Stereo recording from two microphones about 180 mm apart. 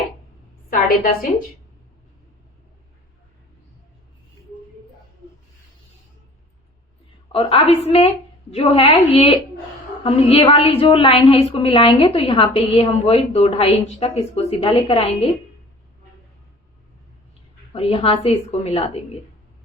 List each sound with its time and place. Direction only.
0.7 s a woman's voice: 50° left (ahead or behind)
7.3 s a woman's voice: 35° left (ahead or behind)
17.7 s a woman's voice: 35° left (ahead or behind)